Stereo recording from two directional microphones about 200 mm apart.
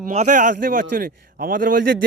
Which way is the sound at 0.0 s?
35° right (ahead or behind).